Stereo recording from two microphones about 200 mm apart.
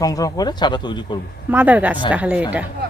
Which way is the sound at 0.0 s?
20° left (ahead or behind).